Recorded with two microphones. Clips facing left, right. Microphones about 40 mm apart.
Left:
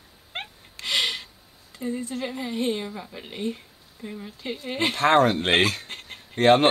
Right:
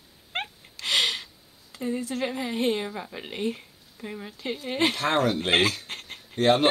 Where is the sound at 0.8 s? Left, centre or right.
Right.